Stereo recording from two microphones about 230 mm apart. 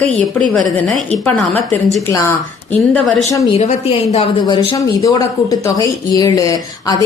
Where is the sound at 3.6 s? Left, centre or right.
Left.